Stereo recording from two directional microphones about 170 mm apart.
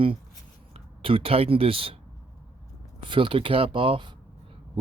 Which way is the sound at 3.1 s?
30° right (ahead or behind).